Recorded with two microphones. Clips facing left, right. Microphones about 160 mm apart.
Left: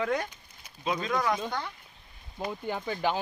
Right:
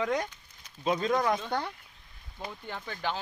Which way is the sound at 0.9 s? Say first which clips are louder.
Right 2 dB; 35° right (ahead or behind).